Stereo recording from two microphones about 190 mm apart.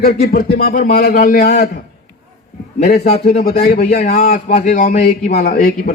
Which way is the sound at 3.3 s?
50° left (ahead or behind).